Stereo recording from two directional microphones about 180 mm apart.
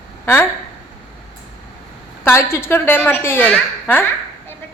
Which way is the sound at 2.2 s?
15° left (ahead or behind).